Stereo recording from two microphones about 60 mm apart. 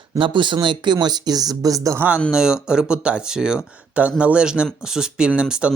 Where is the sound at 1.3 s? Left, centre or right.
Right.